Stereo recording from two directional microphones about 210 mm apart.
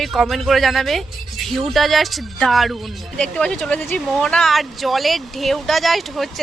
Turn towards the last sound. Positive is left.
turn(degrees=0)  # may be behind; listen again after turning